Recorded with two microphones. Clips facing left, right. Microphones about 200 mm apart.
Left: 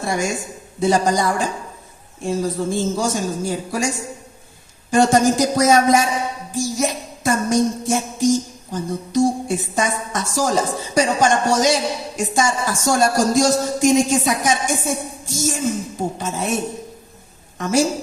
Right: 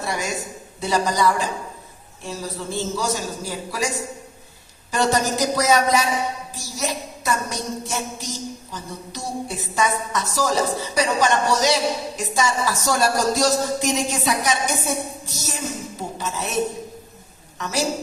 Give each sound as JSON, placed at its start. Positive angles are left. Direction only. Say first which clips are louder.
{"t": 0.0, "sound": "a woman's voice", "louder": "left 4 dB", "side_deg": 50}
{"t": 17.6, "sound": "a woman's voice", "louder": "left 7 dB", "side_deg": 45}